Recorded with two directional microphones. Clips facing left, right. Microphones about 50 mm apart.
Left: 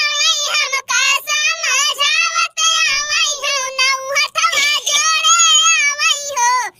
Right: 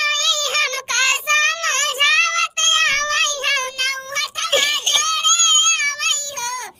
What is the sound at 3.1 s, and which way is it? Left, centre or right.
Child singing, left.